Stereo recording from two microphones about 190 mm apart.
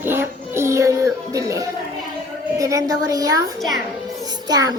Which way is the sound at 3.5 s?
Centre (ahead or behind).